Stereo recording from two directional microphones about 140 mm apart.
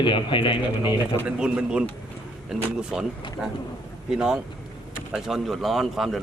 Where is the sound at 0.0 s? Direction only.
35° left (ahead or behind).